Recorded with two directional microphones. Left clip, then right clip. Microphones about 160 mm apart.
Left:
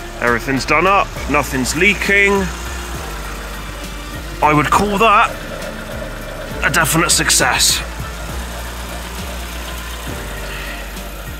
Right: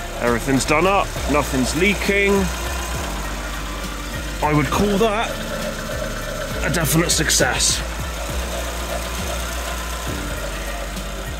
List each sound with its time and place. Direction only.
0.5 s speech: 20° right (ahead or behind)
1.3 s speech: 5° right (ahead or behind)
4.4 s speech: 5° left (ahead or behind)
6.6 s speech: 10° right (ahead or behind)